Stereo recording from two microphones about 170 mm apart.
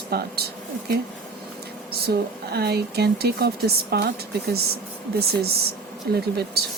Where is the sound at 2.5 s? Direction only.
70° right (ahead or behind).